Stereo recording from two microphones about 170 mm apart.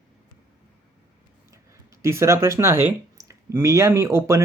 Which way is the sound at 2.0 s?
15° right (ahead or behind).